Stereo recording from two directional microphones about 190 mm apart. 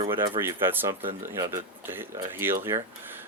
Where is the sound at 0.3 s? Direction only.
10° right (ahead or behind).